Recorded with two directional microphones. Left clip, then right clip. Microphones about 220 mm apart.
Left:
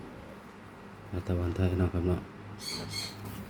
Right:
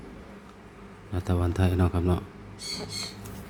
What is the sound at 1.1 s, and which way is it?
Speech, 20° right (ahead or behind).